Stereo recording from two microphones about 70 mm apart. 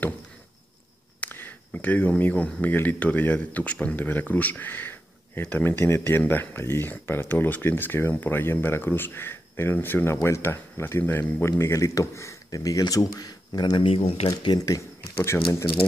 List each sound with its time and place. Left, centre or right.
1.2 s speech: left
11.5 s speech: left
12.5 s speech: left
15.1 s speech: left